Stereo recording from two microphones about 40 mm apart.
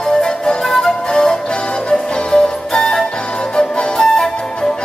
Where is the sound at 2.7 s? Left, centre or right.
Centre.